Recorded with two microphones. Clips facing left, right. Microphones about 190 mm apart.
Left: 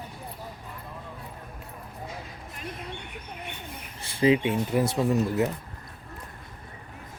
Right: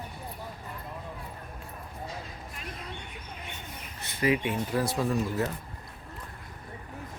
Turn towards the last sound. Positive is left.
turn(degrees=20)  # may be behind; listen again after turning